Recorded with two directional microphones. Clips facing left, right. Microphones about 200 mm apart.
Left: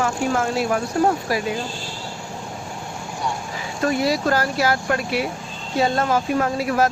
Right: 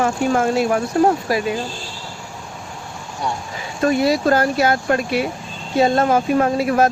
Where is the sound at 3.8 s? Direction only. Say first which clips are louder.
Right 4 dB; 25° right (ahead or behind).